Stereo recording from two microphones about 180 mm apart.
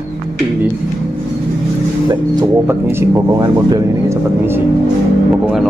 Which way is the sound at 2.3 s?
15° right (ahead or behind).